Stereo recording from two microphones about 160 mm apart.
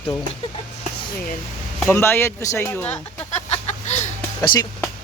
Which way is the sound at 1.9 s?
15° left (ahead or behind).